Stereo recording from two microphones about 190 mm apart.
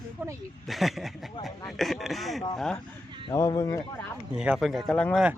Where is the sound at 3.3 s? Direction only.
15° left (ahead or behind).